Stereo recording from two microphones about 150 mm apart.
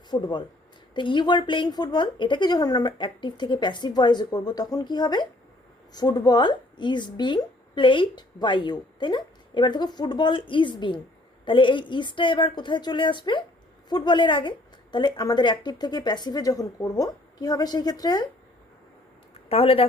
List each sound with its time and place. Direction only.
0.1 s speech: 30° left (ahead or behind)
19.5 s speech: 40° left (ahead or behind)